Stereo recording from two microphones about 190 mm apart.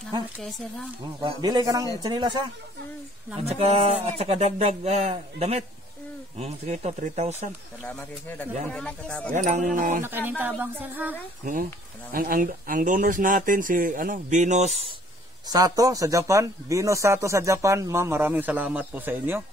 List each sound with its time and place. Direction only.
0.4 s speech: centre (ahead or behind)
1.2 s speech: 20° right (ahead or behind)
3.4 s speech: 35° right (ahead or behind)
7.8 s speech: 10° left (ahead or behind)
9.3 s speech: 40° right (ahead or behind)
10.0 s a man's voice: 10° right (ahead or behind)
12.1 s speech: 50° right (ahead or behind)
15.4 s a man's voice: 20° right (ahead or behind)